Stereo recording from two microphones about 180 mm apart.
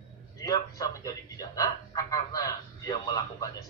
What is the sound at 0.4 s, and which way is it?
A man's voice, 20° left (ahead or behind).